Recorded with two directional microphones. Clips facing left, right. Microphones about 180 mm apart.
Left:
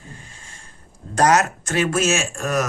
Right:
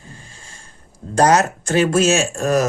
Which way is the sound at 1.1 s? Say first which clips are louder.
Right 3 dB; 30° right (ahead or behind).